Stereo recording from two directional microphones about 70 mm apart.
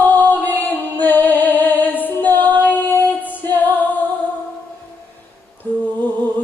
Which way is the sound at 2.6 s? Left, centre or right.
Left.